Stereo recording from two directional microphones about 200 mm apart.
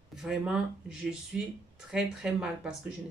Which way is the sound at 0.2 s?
Centre (ahead or behind).